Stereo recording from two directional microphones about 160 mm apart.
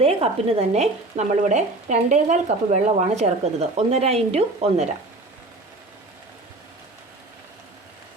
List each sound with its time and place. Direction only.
0.0 s speech: 40° right (ahead or behind)